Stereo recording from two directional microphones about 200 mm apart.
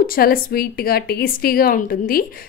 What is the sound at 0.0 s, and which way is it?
A woman's voice, 45° left (ahead or behind).